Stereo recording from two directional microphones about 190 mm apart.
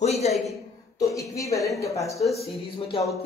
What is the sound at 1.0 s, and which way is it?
A woman's voice, 15° left (ahead or behind).